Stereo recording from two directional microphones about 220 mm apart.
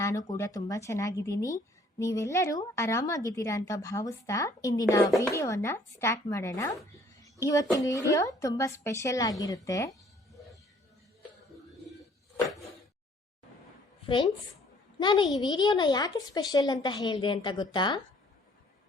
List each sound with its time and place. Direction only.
0.0 s a woman's voice: 15° left (ahead or behind)
14.9 s speech: 20° left (ahead or behind)